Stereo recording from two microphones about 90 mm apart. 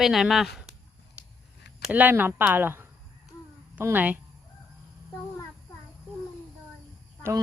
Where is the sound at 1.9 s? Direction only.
20° right (ahead or behind).